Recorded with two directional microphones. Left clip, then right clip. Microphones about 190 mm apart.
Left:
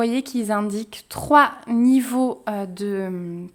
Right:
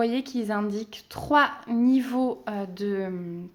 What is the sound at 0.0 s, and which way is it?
A woman's voice, 30° left (ahead or behind).